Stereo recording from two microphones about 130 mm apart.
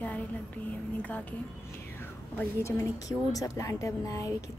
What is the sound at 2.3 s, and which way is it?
A woman's voice, 20° left (ahead or behind).